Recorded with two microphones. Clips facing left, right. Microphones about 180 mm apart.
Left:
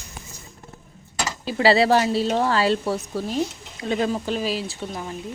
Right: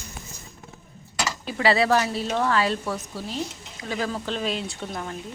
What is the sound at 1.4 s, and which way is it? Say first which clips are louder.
Speech: left 4 dB; 30° left (ahead or behind).